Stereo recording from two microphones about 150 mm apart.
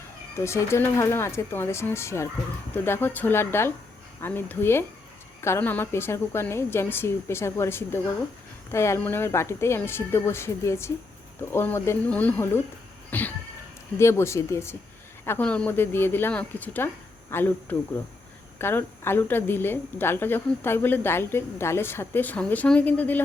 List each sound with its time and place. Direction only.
0.3 s a woman's voice: 20° left (ahead or behind)
13.1 s cat: 10° left (ahead or behind)
14.0 s a woman's voice: 20° left (ahead or behind)